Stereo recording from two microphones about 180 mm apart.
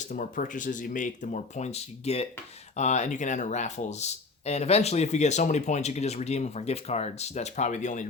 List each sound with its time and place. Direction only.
0.0 s speech: 45° left (ahead or behind)